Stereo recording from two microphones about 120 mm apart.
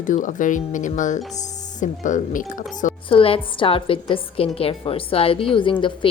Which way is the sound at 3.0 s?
50° left (ahead or behind).